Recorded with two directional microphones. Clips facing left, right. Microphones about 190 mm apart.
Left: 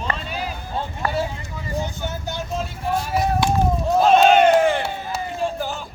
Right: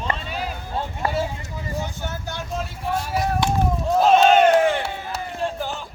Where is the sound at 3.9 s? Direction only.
Centre (ahead or behind).